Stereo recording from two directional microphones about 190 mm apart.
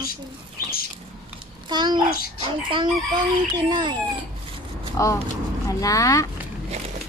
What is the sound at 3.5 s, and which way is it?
Speech, 25° right (ahead or behind).